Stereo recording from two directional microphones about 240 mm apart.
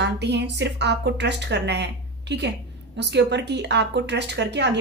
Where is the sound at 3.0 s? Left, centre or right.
Right.